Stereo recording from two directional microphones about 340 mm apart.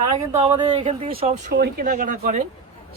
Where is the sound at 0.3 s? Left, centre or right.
Centre.